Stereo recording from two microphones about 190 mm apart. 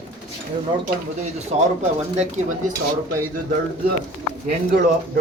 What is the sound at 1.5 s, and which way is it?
Speech, 35° right (ahead or behind).